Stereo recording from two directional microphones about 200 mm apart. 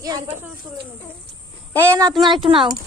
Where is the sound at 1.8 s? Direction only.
15° right (ahead or behind).